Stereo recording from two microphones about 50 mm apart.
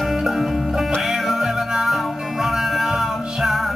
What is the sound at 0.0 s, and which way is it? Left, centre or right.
Music, centre.